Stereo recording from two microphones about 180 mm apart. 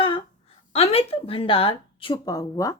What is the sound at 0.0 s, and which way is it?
Speech, 30° left (ahead or behind).